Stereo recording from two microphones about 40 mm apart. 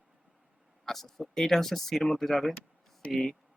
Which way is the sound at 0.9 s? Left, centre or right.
Centre.